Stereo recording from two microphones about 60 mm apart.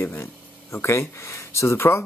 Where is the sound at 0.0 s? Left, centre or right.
Left.